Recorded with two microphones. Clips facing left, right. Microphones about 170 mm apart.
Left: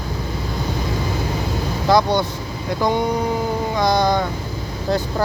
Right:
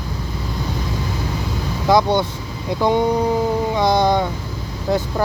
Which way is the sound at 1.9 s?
20° right (ahead or behind).